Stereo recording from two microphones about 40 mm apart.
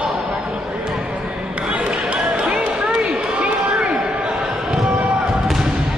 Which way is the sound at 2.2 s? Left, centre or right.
Centre.